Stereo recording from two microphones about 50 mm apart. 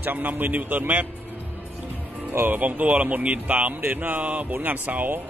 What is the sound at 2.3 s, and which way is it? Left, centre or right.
A man's voice, right.